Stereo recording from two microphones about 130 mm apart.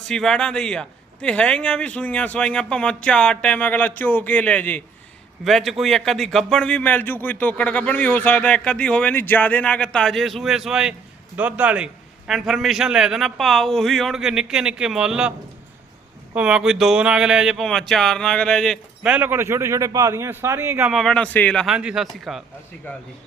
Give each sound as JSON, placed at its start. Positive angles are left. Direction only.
{"t": 0.1, "sound": "a man's voice", "side_deg": 5}
{"t": 16.3, "sound": "a man's voice", "side_deg": -5}
{"t": 19.1, "sound": "a man's voice", "side_deg": -15}
{"t": 20.8, "sound": "a man's voice", "side_deg": 0}
{"t": 21.7, "sound": "a man's voice", "side_deg": -5}
{"t": 22.9, "sound": "a man's voice", "side_deg": 15}